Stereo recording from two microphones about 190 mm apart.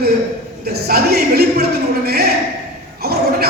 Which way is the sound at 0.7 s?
55° right (ahead or behind).